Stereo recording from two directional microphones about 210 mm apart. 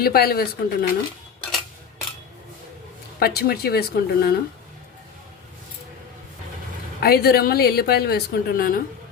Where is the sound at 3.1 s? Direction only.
50° left (ahead or behind).